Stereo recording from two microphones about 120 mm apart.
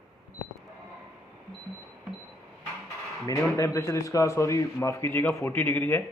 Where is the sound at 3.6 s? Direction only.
25° left (ahead or behind).